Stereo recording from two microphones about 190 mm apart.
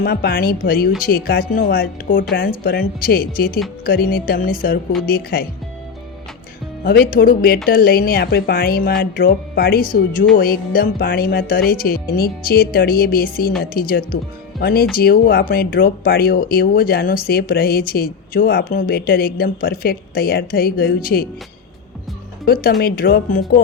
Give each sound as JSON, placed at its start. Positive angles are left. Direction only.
{"t": 0.0, "sound": "speech", "side_deg": 55}
{"t": 6.8, "sound": "speech", "side_deg": 50}
{"t": 22.4, "sound": "speech", "side_deg": 50}